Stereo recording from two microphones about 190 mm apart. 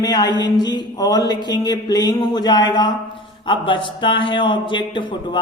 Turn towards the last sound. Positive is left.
turn(degrees=25)  # may be behind; listen again after turning